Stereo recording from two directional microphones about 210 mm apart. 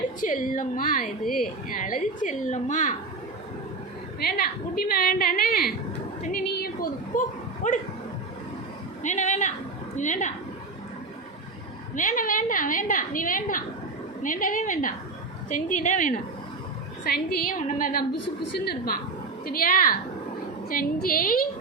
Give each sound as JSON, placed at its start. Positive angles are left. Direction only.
{"t": 0.2, "sound": "a woman's voice", "side_deg": 40}
{"t": 4.2, "sound": "a woman's voice", "side_deg": 45}
{"t": 9.0, "sound": "a woman's voice", "side_deg": 35}
{"t": 11.9, "sound": "a woman's voice", "side_deg": 40}
{"t": 17.0, "sound": "a woman's voice", "side_deg": 50}